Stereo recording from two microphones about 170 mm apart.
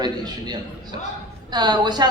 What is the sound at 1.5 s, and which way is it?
Speech, 25° right (ahead or behind).